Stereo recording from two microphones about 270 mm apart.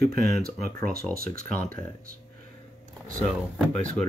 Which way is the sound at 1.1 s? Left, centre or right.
Right.